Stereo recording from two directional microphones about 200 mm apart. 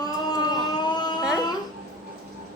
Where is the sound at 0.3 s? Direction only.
20° left (ahead or behind).